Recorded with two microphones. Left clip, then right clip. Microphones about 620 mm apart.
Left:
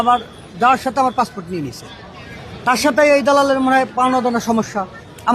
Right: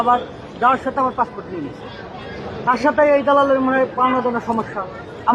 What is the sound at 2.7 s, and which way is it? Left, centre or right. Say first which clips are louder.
A man's voice: left 2 dB; left.